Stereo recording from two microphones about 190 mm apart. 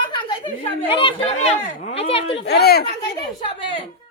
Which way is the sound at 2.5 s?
60° left (ahead or behind).